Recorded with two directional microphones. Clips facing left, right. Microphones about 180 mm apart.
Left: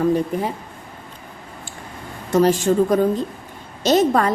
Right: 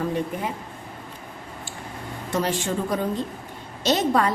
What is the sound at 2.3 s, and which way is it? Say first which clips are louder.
A woman's voice: left 9 dB; 45° left (ahead or behind).